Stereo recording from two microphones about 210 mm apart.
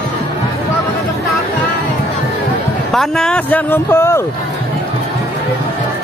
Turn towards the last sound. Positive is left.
turn(degrees=10)  # may be behind; listen again after turning